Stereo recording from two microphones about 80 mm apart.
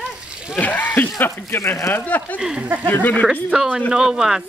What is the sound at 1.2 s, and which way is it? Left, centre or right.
Speech, left.